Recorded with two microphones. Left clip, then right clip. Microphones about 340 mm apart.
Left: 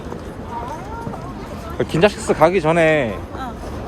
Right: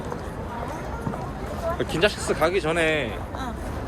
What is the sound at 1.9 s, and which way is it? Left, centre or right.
Speech, centre.